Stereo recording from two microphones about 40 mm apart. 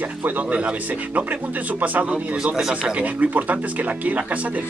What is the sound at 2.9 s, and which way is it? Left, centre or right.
Speech, right.